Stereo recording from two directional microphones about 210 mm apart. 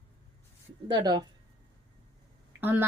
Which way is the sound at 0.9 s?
20° right (ahead or behind).